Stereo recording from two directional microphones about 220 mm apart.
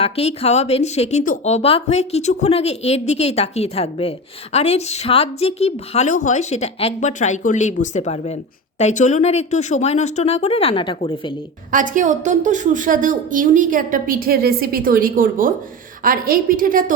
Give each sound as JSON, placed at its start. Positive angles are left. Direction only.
{"t": 0.0, "sound": "speech", "side_deg": 30}
{"t": 11.7, "sound": "a woman's voice", "side_deg": -35}